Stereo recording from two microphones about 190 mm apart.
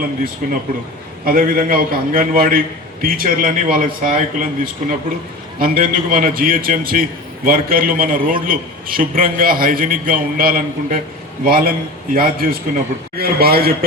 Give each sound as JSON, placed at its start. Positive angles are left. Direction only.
{"t": 0.4, "sound": "a man's voice", "side_deg": -45}